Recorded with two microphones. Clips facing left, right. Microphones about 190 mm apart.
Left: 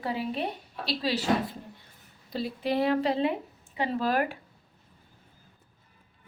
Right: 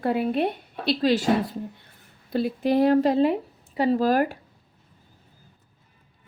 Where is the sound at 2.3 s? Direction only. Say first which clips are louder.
Right 7 dB; 55° right (ahead or behind).